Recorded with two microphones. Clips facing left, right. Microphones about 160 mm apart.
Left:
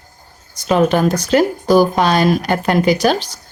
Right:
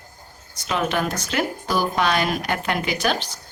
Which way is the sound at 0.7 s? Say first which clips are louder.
Left 10 dB; 40° left (ahead or behind).